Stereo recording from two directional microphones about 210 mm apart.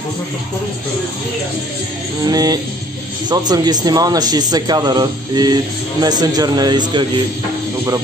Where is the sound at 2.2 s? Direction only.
20° right (ahead or behind).